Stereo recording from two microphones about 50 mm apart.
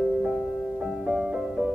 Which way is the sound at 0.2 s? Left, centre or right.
Centre.